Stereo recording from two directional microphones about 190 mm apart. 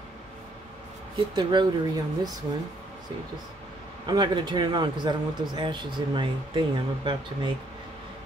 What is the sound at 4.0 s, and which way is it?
Speech, 25° right (ahead or behind).